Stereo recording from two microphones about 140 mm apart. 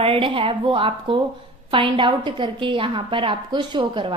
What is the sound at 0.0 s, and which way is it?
A woman's voice, 40° right (ahead or behind).